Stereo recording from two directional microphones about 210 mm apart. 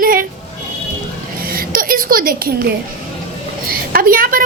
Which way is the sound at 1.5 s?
45° right (ahead or behind).